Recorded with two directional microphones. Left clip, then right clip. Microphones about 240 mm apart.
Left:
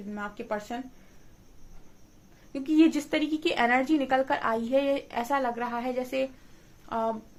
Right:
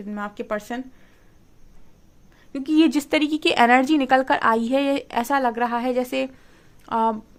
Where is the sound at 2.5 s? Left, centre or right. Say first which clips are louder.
Right 4 dB; right.